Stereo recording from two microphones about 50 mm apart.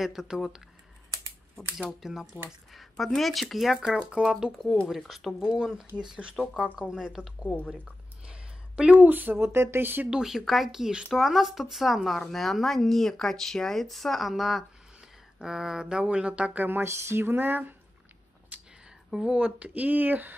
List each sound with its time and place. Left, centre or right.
0.0 s speech: centre
2.0 s speech: centre
3.9 s speech: centre
4.8 s speech: centre
6.0 s speech: centre
7.5 s speech: centre
7.8 s a sound: right
8.9 s speech: right
10.0 s speech: centre
12.2 s speech: centre; by 16.6 s right
16.8 s speech: right
19.2 s speech: right